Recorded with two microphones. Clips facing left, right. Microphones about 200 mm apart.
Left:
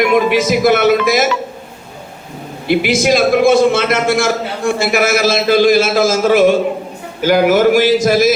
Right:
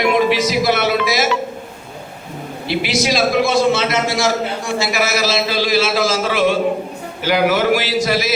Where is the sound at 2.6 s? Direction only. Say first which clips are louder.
Left 6 dB; 50° left (ahead or behind).